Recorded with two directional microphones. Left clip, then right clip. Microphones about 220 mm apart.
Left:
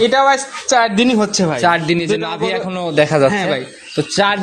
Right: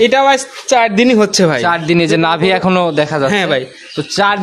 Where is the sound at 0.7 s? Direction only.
25° right (ahead or behind).